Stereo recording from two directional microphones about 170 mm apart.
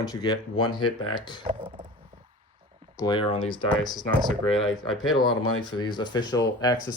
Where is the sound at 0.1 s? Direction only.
25° left (ahead or behind).